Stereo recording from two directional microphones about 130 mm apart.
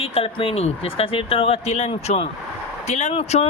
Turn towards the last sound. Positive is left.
turn(degrees=55)  # may be behind; listen again after turning